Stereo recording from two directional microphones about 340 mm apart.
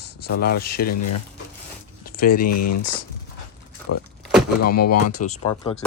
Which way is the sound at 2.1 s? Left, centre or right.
Left.